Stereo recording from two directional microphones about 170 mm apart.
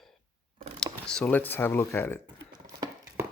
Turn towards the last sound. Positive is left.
turn(degrees=-20)  # may be behind; listen again after turning